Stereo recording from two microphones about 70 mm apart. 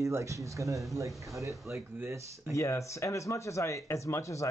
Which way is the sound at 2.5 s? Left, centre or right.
Left.